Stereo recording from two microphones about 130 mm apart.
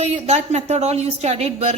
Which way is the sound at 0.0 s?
55° right (ahead or behind).